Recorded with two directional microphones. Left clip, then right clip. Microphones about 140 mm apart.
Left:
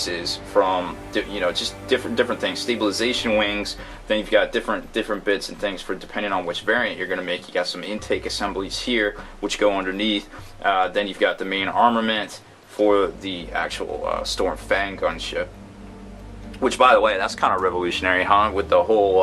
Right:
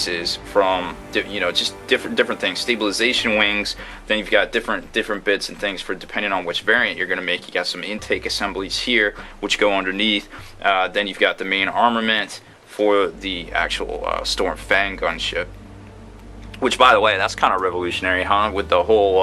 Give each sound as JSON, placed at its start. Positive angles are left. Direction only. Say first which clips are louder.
{"t": 0.1, "sound": "speech", "louder": "right 2 dB", "side_deg": -15}
{"t": 16.6, "sound": "speech", "louder": "right 2 dB", "side_deg": -20}